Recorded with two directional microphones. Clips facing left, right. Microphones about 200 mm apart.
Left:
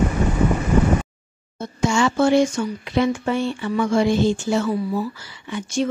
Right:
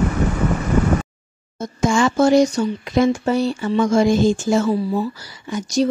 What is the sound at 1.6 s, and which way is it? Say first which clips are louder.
Speech: right 2 dB; 50° right (ahead or behind).